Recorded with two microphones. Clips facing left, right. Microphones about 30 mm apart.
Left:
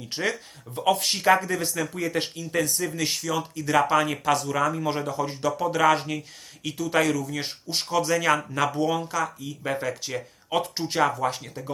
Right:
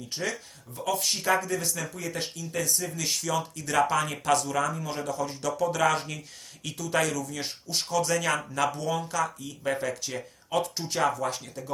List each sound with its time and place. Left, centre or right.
0.1 s speech: left
0.9 s speech: left
1.2 s a man's voice: left
2.1 s a man's voice: left
3.2 s speech: centre
4.7 s a man's voice: left
8.0 s speech: centre
8.7 s a man's voice: left
9.0 s speech: centre
10.0 s a man's voice: centre